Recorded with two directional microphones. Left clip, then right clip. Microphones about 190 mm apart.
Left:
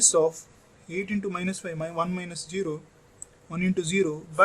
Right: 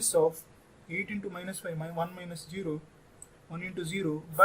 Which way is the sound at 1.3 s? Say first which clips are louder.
Left 6 dB; 50° left (ahead or behind).